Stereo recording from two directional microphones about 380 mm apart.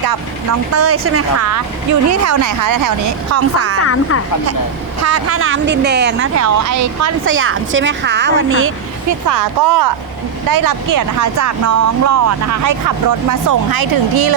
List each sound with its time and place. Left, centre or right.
0.7 s speech: right
3.3 s speech: right
5.0 s speech: right
7.3 s speech: right
9.0 s speech: right